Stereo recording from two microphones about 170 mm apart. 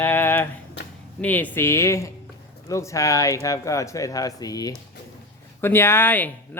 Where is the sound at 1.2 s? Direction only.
10° left (ahead or behind).